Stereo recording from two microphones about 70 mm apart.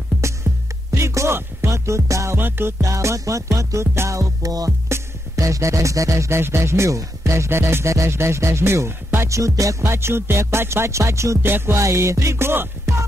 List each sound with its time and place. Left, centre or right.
0.9 s music: right
2.3 s speech: right
2.8 s music: right
4.8 s music: right
9.9 s speech: right
11.4 s music: right